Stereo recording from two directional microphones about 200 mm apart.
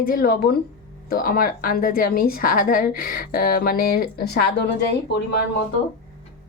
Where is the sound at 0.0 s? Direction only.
45° left (ahead or behind).